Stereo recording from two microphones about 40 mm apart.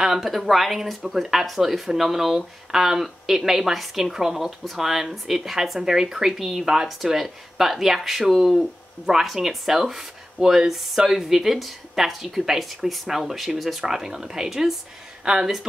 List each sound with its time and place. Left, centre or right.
0.0 s speech: centre